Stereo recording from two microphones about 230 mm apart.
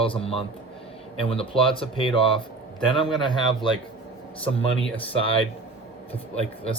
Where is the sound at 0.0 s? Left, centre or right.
Left.